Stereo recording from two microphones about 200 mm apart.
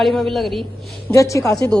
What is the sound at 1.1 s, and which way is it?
Speech, 15° left (ahead or behind).